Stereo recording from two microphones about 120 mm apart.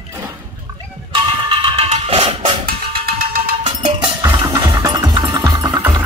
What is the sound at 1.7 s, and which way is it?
Music, 60° right (ahead or behind).